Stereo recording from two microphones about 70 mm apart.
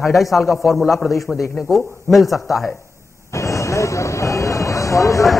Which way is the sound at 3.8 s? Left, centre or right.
Left.